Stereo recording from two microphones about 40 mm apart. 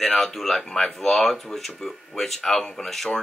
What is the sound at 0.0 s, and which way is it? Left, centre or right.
Speech, centre.